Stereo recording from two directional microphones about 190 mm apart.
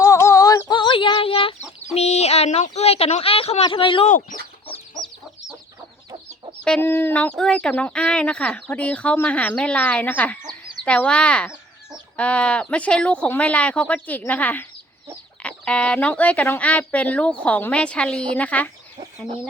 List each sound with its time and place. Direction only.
0.0 s a sound: 15° left (ahead or behind)
2.0 s speech: 35° left (ahead or behind)
4.1 s speech: 45° left (ahead or behind)
6.7 s speech: 10° left (ahead or behind)